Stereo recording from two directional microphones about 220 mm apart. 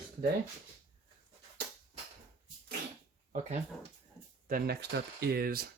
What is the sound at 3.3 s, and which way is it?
Speech, 30° right (ahead or behind).